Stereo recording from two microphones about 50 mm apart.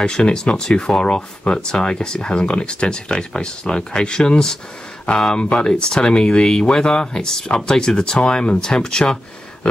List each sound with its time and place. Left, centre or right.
0.0 s speech: centre